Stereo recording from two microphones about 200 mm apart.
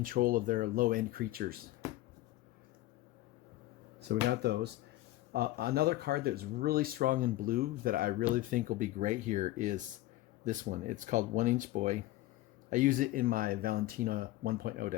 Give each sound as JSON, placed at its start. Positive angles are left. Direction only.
{"t": 0.0, "sound": "speech", "side_deg": -45}
{"t": 4.1, "sound": "speech", "side_deg": -55}